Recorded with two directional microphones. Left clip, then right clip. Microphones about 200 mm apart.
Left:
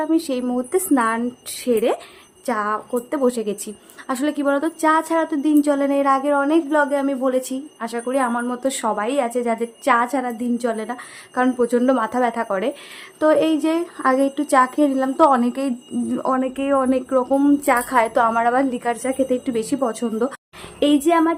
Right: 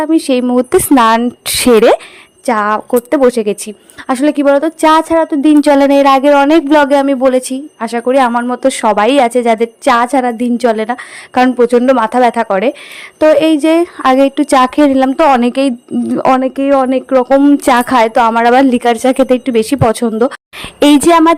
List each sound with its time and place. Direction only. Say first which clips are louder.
0.0 s a woman's voice: right 9 dB; 40° right (ahead or behind)
17.7 s a woman's voice: right 9 dB; 50° right (ahead or behind)